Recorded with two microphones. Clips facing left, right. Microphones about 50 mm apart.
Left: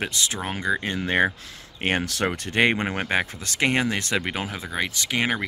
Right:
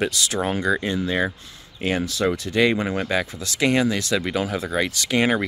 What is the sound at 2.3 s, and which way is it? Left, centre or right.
Speech, left.